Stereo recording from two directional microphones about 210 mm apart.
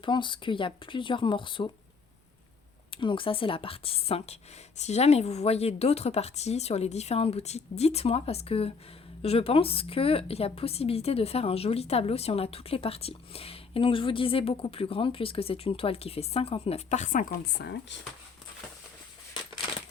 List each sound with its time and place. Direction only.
0.0 s a woman's voice: 25° left (ahead or behind)
2.9 s a woman's voice: 25° left (ahead or behind); by 17.9 s 55° left (ahead or behind)